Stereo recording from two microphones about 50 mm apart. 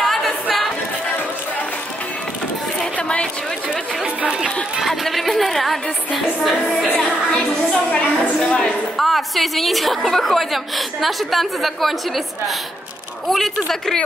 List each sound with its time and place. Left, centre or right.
0.0 s singing: centre
2.8 s chatter: centre
4.8 s a woman's voice: centre
7.3 s a woman's voice: left
8.9 s a woman's voice: centre
13.3 s a woman's voice: centre